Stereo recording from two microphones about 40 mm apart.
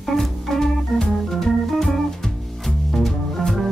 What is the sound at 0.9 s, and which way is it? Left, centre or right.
Organ, centre.